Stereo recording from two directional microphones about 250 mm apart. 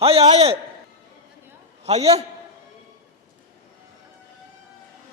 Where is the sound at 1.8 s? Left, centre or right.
Right.